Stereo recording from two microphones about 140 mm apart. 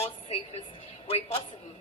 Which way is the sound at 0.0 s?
45° left (ahead or behind).